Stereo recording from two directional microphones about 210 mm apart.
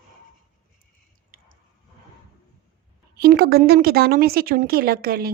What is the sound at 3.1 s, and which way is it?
Speech, 45° right (ahead or behind).